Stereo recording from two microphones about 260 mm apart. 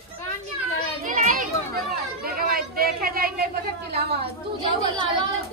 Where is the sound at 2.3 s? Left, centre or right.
Right.